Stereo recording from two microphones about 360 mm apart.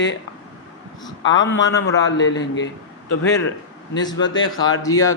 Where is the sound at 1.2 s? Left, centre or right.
Left.